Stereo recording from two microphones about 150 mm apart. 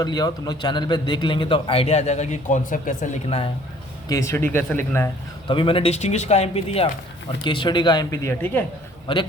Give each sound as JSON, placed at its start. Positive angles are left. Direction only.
{"t": 0.0, "sound": "a man's voice", "side_deg": 25}
{"t": 3.2, "sound": "a man's voice", "side_deg": 40}
{"t": 4.1, "sound": "speech", "side_deg": 20}
{"t": 5.5, "sound": "speech", "side_deg": 35}
{"t": 7.4, "sound": "speech", "side_deg": 30}
{"t": 9.1, "sound": "a man's voice", "side_deg": 35}